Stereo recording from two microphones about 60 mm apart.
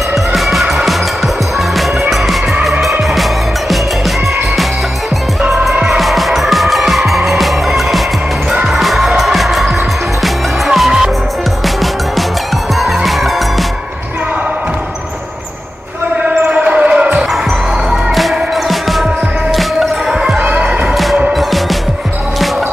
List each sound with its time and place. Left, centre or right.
0.3 s music: centre
1.8 s fowl: centre
5.5 s music: centre
16.3 s basketball bounce: centre
18.1 s music: centre
20.3 s music: centre
20.8 s music: centre